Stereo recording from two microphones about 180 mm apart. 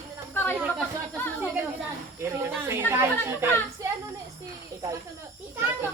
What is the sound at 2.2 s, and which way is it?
Speech, 15° right (ahead or behind).